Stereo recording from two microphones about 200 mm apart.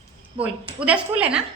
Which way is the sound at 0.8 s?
5° right (ahead or behind).